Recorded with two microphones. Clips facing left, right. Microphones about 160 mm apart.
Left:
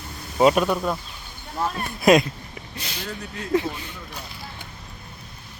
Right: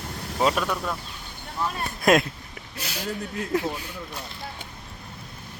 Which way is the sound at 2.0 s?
Centre (ahead or behind).